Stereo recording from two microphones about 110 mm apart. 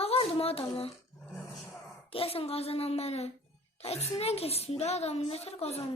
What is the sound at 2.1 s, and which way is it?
A woman's voice, 60° left (ahead or behind).